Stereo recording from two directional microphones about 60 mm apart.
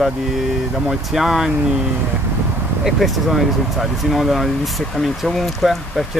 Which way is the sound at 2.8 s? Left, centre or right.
Centre.